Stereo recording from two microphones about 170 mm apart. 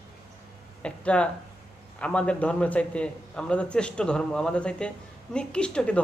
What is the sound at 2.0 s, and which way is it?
A man's voice, 5° left (ahead or behind).